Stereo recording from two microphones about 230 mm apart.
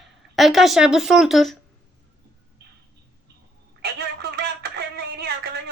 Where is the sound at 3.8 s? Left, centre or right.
Right.